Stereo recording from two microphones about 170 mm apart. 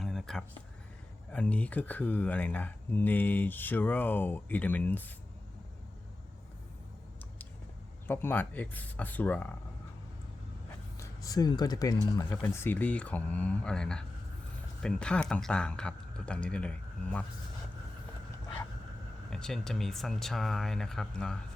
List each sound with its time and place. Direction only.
0.0 s a sound: centre (ahead or behind)
1.3 s speech: 10° left (ahead or behind)
8.0 s speech: 10° left (ahead or behind)
10.9 s speech: 20° left (ahead or behind)
19.3 s speech: 5° left (ahead or behind)